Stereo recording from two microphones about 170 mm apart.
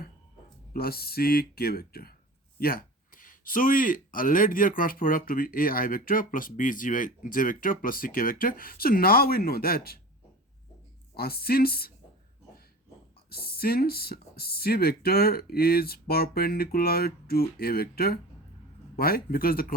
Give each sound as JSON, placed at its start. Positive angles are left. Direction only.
{"t": 0.7, "sound": "speech", "side_deg": 65}
{"t": 11.2, "sound": "speech", "side_deg": 65}
{"t": 13.3, "sound": "speech", "side_deg": 65}